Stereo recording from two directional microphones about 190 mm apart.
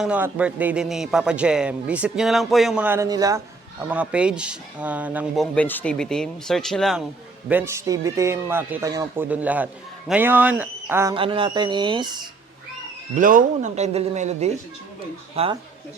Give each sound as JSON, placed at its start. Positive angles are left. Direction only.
{"t": 0.0, "sound": "a man's voice", "side_deg": -5}
{"t": 3.8, "sound": "speech", "side_deg": -5}
{"t": 5.5, "sound": "a man's voice", "side_deg": 10}
{"t": 7.4, "sound": "speech", "side_deg": -10}
{"t": 11.1, "sound": "speech", "side_deg": -25}
{"t": 13.1, "sound": "speech", "side_deg": -45}